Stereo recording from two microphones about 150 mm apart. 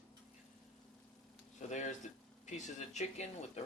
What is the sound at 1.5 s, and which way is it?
Speech, 55° left (ahead or behind).